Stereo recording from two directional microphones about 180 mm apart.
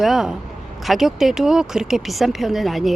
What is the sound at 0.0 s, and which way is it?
Speech, centre (ahead or behind).